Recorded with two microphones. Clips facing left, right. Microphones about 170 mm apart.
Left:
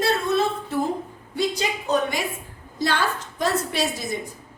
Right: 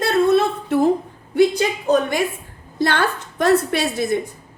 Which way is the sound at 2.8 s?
60° right (ahead or behind).